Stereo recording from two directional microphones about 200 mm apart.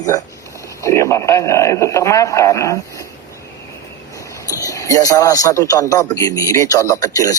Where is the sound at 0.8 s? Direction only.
15° left (ahead or behind).